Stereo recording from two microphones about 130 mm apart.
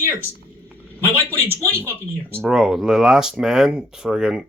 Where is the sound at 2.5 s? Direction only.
5° right (ahead or behind).